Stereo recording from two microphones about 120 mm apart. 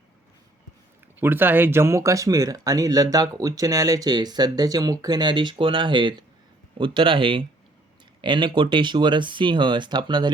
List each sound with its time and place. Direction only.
1.2 s speech: 15° right (ahead or behind); by 10.3 s 40° right (ahead or behind)